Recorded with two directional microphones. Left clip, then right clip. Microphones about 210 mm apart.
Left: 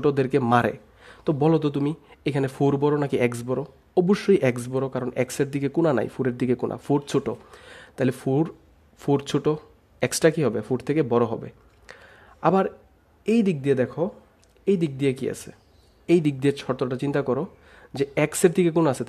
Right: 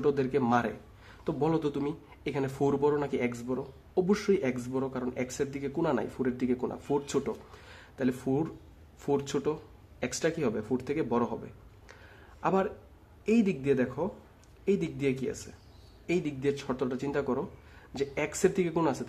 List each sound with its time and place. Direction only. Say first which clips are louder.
0.0 s speech: left 6 dB; 40° left (ahead or behind)